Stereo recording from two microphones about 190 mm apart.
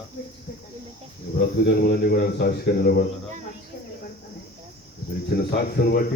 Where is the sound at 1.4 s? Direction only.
55° left (ahead or behind).